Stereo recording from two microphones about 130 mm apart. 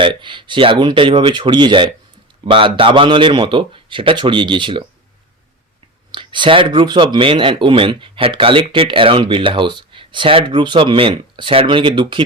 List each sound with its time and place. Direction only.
0.0 s speech: 40° right (ahead or behind)
6.1 s speech: 40° right (ahead or behind)